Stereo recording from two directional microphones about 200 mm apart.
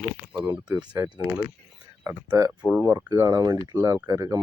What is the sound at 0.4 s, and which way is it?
Speech, 20° right (ahead or behind).